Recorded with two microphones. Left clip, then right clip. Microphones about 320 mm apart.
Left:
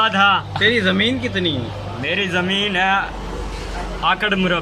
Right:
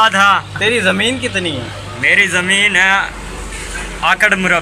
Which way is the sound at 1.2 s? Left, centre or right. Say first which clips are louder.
Right 3 dB; right.